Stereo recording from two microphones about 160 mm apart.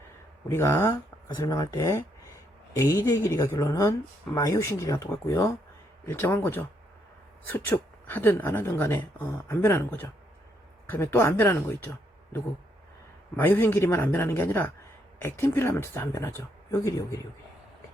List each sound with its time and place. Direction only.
0.4 s a woman's voice: 15° left (ahead or behind)
13.3 s speech: 15° left (ahead or behind)